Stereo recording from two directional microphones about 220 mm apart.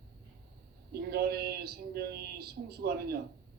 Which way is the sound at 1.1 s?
45° right (ahead or behind).